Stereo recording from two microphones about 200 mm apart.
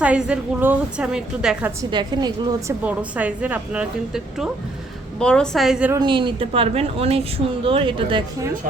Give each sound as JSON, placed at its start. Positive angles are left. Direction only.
{"t": 0.0, "sound": "a woman's voice", "side_deg": -5}
{"t": 1.8, "sound": "a woman's voice", "side_deg": -20}
{"t": 2.8, "sound": "a woman's voice", "side_deg": -5}
{"t": 5.9, "sound": "a woman's voice", "side_deg": -25}